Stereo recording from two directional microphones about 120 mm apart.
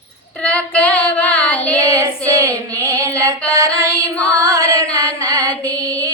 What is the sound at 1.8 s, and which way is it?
A woman's voice, 25° right (ahead or behind).